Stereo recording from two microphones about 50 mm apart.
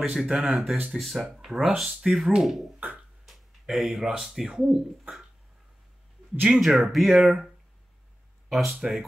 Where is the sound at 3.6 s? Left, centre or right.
Centre.